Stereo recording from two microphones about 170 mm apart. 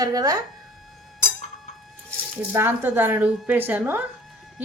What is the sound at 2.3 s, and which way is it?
A woman's voice, 15° right (ahead or behind).